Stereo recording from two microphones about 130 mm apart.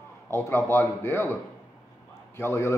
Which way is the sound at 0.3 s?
20° left (ahead or behind).